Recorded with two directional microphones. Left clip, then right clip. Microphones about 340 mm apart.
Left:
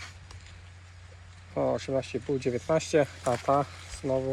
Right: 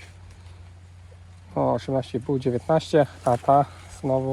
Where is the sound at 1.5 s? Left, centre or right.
Centre.